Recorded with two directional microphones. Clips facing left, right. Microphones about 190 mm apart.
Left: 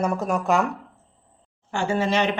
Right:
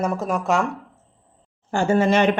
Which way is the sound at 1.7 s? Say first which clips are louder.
Right 5 dB; 45° right (ahead or behind).